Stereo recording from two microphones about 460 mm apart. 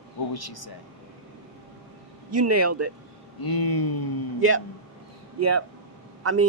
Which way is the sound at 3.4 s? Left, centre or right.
Left.